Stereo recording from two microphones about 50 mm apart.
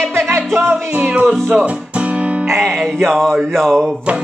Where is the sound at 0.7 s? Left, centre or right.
Right.